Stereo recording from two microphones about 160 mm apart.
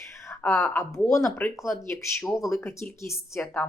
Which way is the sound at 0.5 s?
5° left (ahead or behind).